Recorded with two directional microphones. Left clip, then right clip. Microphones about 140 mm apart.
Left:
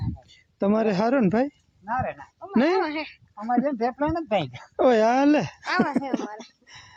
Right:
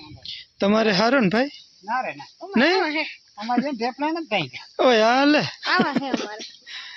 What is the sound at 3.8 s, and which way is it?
Speech, 30° left (ahead or behind).